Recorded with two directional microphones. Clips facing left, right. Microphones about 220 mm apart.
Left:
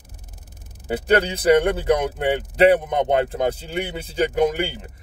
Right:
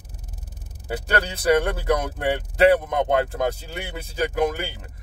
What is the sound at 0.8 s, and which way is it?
Speech, 20° left (ahead or behind).